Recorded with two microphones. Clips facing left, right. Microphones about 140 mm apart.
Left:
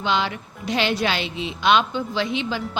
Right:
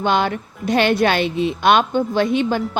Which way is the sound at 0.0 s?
50° right (ahead or behind).